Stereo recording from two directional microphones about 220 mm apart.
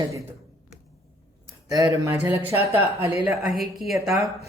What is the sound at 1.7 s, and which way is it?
Speech, 10° right (ahead or behind).